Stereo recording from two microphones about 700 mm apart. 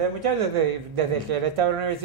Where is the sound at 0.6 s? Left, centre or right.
Right.